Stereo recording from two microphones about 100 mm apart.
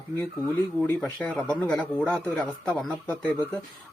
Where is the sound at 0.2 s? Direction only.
20° left (ahead or behind).